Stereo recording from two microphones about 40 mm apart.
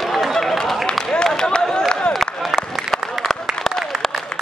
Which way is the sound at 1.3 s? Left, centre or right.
Centre.